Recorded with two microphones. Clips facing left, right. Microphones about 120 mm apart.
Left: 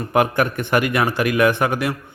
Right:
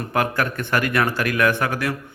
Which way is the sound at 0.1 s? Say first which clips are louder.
Left 5 dB; 15° left (ahead or behind).